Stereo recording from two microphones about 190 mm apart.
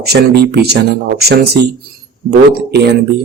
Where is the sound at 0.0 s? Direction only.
60° right (ahead or behind).